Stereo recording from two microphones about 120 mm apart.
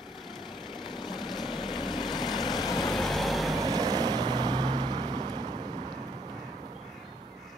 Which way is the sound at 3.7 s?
30° right (ahead or behind).